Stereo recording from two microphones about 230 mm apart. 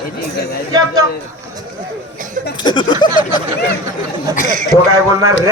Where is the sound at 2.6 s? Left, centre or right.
Centre.